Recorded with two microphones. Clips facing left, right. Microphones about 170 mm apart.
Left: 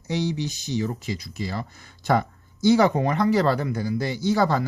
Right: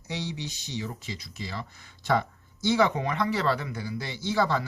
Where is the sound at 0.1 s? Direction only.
40° left (ahead or behind).